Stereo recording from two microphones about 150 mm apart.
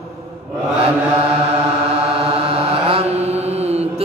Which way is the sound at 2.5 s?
40° right (ahead or behind).